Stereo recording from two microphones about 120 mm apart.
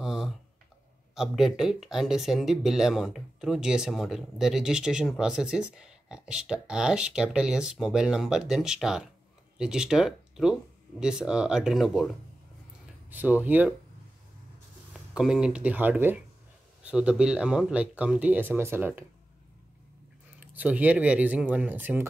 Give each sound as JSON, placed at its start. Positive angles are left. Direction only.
{"t": 0.0, "sound": "a sound", "side_deg": -5}
{"t": 1.1, "sound": "speech", "side_deg": -5}
{"t": 13.1, "sound": "speech", "side_deg": -15}
{"t": 15.1, "sound": "speech", "side_deg": -5}
{"t": 20.3, "sound": "speech", "side_deg": -15}